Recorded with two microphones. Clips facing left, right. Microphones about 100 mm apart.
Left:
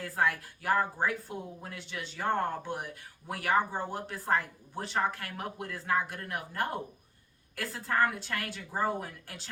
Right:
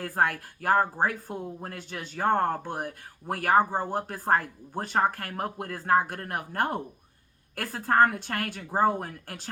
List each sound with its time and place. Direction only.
0.0 s speech: 50° right (ahead or behind)